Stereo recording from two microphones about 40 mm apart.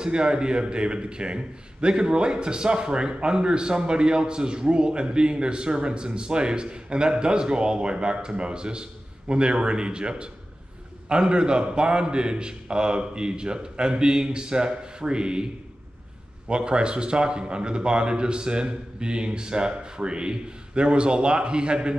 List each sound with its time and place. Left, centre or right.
0.0 s a man's voice: right
16.4 s a man's voice: right